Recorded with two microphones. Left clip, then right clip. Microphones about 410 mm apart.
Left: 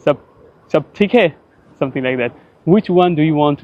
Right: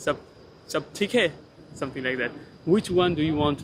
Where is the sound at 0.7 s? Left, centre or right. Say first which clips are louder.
Left 11 dB; left.